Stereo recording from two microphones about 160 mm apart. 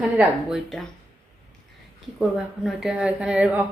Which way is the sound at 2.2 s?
Centre (ahead or behind).